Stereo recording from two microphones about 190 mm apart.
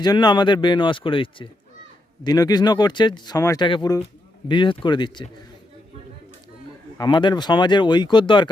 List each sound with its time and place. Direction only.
0.0 s speech: 20° left (ahead or behind)
7.0 s speech: 25° left (ahead or behind)